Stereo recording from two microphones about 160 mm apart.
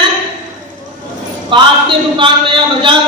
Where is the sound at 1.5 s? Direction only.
30° right (ahead or behind).